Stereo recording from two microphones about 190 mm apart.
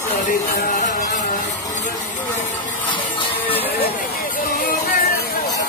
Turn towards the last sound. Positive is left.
turn(degrees=50)  # may be behind; listen again after turning